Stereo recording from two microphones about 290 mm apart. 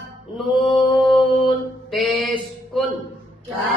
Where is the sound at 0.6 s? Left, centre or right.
Centre.